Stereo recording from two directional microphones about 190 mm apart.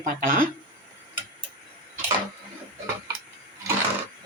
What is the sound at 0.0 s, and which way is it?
Speech, 45° right (ahead or behind).